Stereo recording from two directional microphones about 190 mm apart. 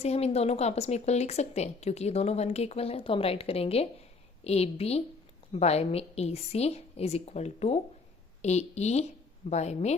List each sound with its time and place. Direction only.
0.0 s speech: 35° left (ahead or behind)